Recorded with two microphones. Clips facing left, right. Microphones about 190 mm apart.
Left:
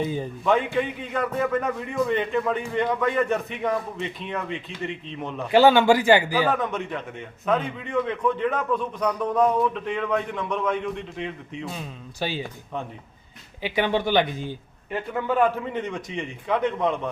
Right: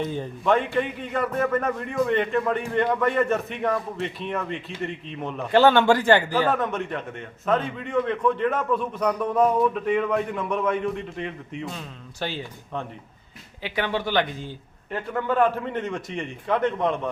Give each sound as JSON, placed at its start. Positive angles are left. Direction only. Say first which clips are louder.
{"t": 0.0, "sound": "a man's voice", "louder": "left 1 dB", "side_deg": 5}
{"t": 12.2, "sound": "speech", "louder": "left 2 dB", "side_deg": 10}
{"t": 15.3, "sound": "a man's voice", "louder": "even", "side_deg": 5}